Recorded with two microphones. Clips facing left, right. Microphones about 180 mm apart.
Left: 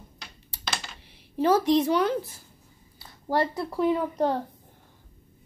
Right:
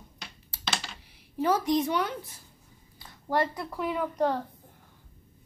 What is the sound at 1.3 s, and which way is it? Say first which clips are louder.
Speech: left 4 dB; 25° left (ahead or behind).